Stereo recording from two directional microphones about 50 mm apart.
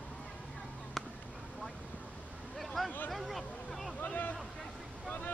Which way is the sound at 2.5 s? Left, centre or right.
Centre.